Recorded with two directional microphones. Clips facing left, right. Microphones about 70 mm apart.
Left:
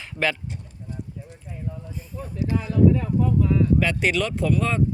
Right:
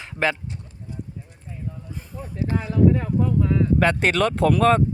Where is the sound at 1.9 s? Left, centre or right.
Right.